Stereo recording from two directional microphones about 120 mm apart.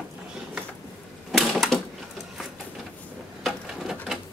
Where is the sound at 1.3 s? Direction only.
Centre (ahead or behind).